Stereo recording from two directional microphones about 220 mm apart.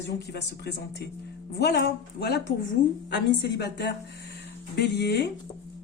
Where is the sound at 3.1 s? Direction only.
50° left (ahead or behind).